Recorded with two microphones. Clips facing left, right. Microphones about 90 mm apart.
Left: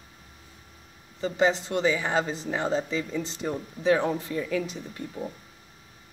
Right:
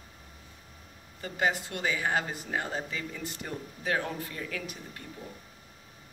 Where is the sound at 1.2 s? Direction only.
25° left (ahead or behind).